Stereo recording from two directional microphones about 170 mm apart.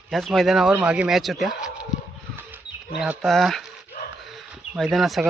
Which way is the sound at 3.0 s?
Centre (ahead or behind).